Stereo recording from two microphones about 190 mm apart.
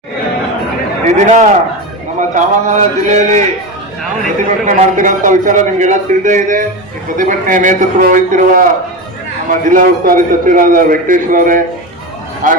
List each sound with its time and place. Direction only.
1.0 s a man's voice: 40° right (ahead or behind)
4.4 s a man's voice: 45° right (ahead or behind)